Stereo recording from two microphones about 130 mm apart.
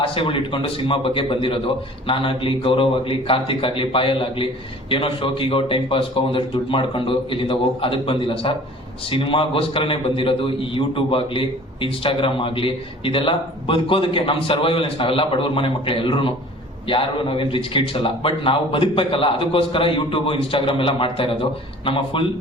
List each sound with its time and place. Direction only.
0.0 s a man's voice: 45° left (ahead or behind)